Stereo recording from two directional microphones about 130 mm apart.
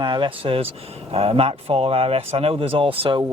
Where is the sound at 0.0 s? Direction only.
35° right (ahead or behind).